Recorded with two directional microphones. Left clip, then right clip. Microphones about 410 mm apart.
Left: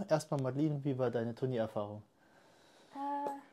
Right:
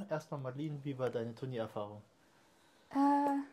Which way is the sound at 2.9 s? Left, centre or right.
Right.